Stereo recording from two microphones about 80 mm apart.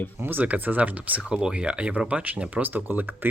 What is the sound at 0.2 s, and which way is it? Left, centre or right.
Speech, right.